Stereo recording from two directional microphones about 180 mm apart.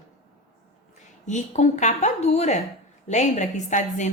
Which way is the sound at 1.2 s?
40° left (ahead or behind).